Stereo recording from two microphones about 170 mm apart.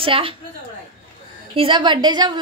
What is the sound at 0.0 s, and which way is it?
Speech, 30° right (ahead or behind).